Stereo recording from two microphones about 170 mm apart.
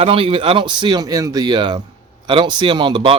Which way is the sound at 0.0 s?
35° right (ahead or behind).